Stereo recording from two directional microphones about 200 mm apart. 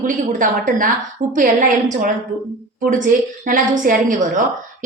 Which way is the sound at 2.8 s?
40° right (ahead or behind).